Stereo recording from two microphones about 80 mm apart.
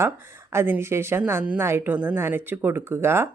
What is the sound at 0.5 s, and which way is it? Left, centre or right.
Speech, right.